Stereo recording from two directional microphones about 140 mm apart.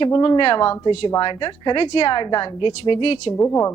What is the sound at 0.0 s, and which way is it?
A woman's voice, 35° left (ahead or behind).